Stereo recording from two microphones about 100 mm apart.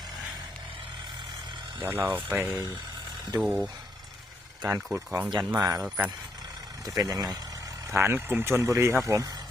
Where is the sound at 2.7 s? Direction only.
45° right (ahead or behind).